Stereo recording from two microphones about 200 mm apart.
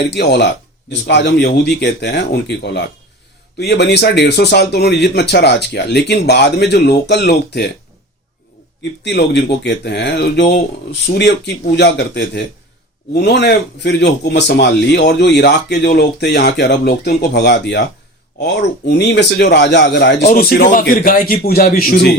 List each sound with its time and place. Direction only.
0.1 s speech: 60° left (ahead or behind)
8.8 s speech: 60° left (ahead or behind)
20.2 s a man's voice: 45° left (ahead or behind)